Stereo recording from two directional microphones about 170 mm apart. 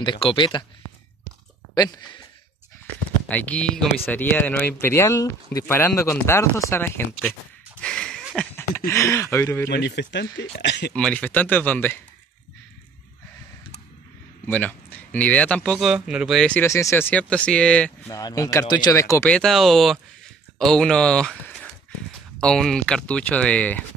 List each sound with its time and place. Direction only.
0.0 s speech: 30° left (ahead or behind)
1.8 s speech: 25° left (ahead or behind)
3.3 s speech: 10° left (ahead or behind)
7.8 s a sound: 5° left (ahead or behind)
8.5 s speech: 15° left (ahead or behind)
9.7 s speech: 85° left
10.9 s speech: 5° left (ahead or behind)
14.4 s speech: 10° left (ahead or behind)
16.6 s speech: 15° left (ahead or behind)
18.1 s speech: 20° left (ahead or behind)
19.3 s speech: centre (ahead or behind)